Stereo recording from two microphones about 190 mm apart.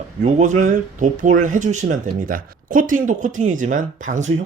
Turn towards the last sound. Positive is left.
turn(degrees=-40)  # may be behind; listen again after turning